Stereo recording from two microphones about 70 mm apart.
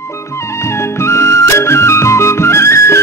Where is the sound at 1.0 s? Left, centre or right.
Left.